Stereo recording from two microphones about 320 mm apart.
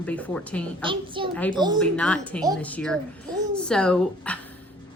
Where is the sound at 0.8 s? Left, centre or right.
Centre.